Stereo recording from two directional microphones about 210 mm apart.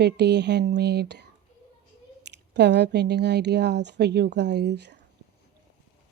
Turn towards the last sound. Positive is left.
turn(degrees=-55)  # may be behind; listen again after turning